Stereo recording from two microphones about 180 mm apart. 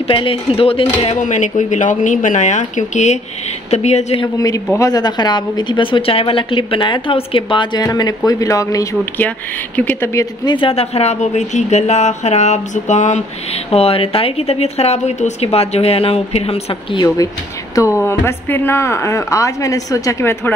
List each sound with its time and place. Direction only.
0.0 s a woman's voice: 30° left (ahead or behind)
1.0 s a woman's voice: 40° left (ahead or behind)
4.7 s a woman's voice: 20° left (ahead or behind)
17.7 s speech: 15° left (ahead or behind)